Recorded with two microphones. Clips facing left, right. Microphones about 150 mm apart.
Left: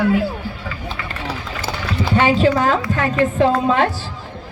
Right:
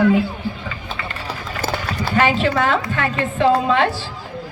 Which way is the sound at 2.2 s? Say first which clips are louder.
Left 2 dB; 35° left (ahead or behind).